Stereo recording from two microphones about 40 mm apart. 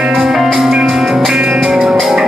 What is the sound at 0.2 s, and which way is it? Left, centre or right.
Music, centre.